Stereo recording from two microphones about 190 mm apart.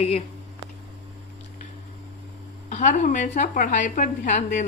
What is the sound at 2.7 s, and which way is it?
A woman's voice, 40° left (ahead or behind).